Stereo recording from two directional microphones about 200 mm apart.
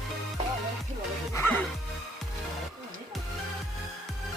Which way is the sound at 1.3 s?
10° left (ahead or behind).